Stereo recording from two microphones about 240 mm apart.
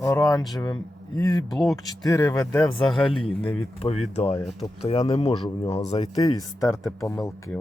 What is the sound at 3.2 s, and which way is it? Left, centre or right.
Speech, left.